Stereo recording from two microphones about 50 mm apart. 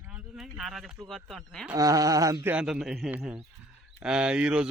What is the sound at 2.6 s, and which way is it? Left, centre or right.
Speech, centre.